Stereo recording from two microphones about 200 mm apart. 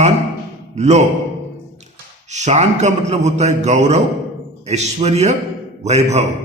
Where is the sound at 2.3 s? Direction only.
35° right (ahead or behind).